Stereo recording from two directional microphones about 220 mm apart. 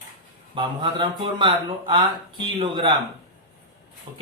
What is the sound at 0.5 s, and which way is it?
Speech, 20° right (ahead or behind).